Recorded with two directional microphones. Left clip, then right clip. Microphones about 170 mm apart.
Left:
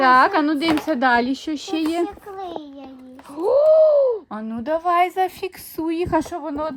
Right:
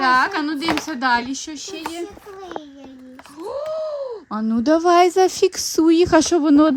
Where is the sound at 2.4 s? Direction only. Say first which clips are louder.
Left 1 dB; 35° left (ahead or behind).